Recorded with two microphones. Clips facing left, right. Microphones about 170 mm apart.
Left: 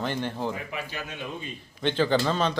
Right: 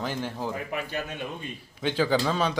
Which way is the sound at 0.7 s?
50° right (ahead or behind).